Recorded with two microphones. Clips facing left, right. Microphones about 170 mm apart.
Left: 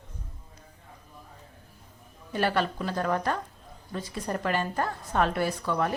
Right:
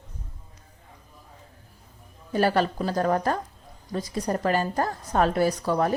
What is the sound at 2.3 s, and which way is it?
A woman's voice, 40° right (ahead or behind).